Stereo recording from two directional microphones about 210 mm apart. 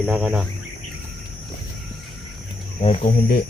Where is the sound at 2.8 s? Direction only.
30° left (ahead or behind).